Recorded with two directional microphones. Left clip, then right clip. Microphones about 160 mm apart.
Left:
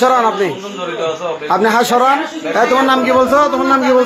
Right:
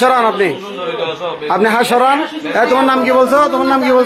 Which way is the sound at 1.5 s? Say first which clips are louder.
Even; centre (ahead or behind).